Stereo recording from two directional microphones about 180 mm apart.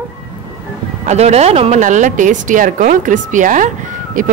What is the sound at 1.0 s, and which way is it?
Speech, 35° right (ahead or behind).